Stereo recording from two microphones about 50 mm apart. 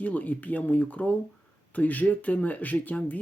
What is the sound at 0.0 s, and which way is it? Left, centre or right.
Speech, left.